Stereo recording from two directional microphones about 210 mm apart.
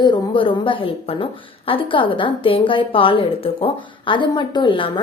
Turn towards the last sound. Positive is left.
turn(degrees=25)  # may be behind; listen again after turning